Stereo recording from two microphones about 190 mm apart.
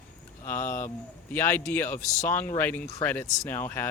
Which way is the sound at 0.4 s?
10° left (ahead or behind).